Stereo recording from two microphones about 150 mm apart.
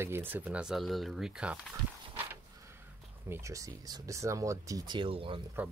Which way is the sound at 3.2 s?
20° right (ahead or behind).